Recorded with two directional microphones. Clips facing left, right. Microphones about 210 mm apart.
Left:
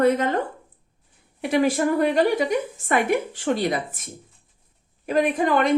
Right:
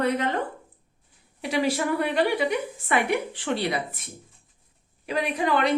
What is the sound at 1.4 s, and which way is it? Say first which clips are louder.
A woman's voice: left 5 dB; 50° left (ahead or behind).